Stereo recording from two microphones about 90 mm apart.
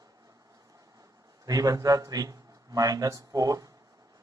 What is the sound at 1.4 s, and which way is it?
Speech, 40° right (ahead or behind).